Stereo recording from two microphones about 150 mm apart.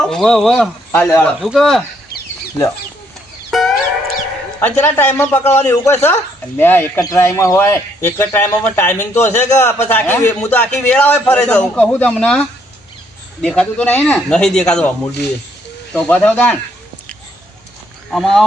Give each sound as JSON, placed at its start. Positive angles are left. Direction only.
{"t": 0.0, "sound": "a man's voice", "side_deg": 5}
{"t": 3.5, "sound": "chicken", "side_deg": 0}
{"t": 4.6, "sound": "a man's voice", "side_deg": 15}
{"t": 18.1, "sound": "a man's voice", "side_deg": 0}